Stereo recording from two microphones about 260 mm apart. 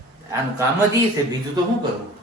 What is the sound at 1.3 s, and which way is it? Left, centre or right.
Speech, centre.